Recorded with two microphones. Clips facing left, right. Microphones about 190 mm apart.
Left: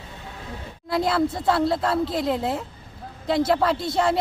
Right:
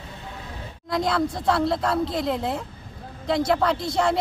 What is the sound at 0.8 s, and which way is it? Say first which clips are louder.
Speech: left 2 dB; 5° left (ahead or behind).